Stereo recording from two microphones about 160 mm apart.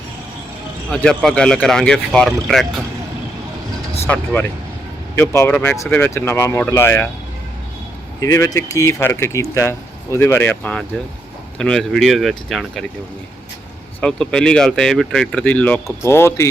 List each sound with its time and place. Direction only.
0.9 s speech: 5° left (ahead or behind)
4.0 s speech: 10° left (ahead or behind)
8.2 s speech: 20° left (ahead or behind); by 12.8 s centre (ahead or behind)
14.0 s speech: 5° left (ahead or behind)